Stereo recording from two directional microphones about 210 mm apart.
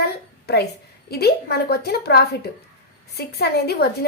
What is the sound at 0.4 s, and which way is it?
A woman's voice, 50° left (ahead or behind).